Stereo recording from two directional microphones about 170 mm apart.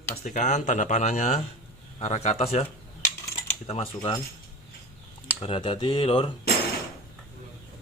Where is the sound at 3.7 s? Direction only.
35° left (ahead or behind).